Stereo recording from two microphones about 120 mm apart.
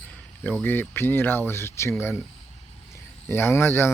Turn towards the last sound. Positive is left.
turn(degrees=20)  # may be behind; listen again after turning